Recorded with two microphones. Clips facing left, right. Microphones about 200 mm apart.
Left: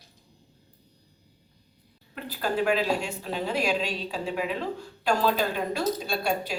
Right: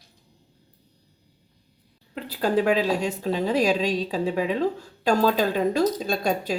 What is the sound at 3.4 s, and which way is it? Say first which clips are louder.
A woman's voice: right 5 dB; 40° right (ahead or behind).